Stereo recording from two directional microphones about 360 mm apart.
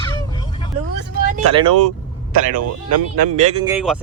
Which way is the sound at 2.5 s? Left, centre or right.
Right.